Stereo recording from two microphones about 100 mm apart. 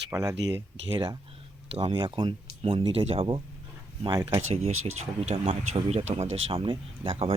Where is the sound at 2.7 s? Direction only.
70° right (ahead or behind).